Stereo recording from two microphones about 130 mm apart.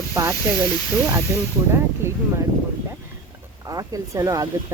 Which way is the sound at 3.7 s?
25° right (ahead or behind).